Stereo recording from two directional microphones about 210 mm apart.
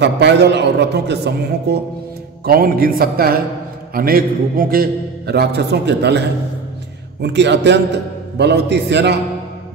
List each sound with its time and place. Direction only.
0.0 s a man's voice: 55° right (ahead or behind)